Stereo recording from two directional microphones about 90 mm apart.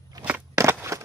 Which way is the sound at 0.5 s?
30° right (ahead or behind).